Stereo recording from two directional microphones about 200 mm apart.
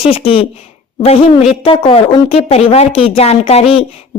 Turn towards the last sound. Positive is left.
turn(degrees=30)  # may be behind; listen again after turning